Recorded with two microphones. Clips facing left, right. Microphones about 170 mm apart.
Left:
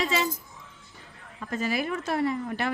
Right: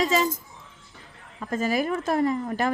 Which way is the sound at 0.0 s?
40° right (ahead or behind).